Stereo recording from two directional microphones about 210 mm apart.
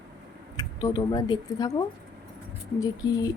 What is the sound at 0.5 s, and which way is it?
Speech, 15° left (ahead or behind).